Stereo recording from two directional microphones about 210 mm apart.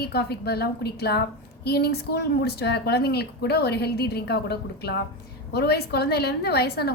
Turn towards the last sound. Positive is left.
turn(degrees=50)  # may be behind; listen again after turning